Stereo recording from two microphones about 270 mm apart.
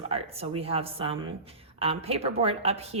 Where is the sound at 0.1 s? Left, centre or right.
Right.